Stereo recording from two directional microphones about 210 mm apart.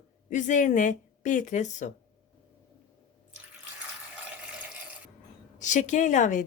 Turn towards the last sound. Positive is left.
turn(degrees=35)  # may be behind; listen again after turning